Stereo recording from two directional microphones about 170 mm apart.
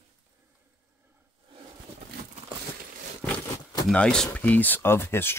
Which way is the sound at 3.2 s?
20° left (ahead or behind).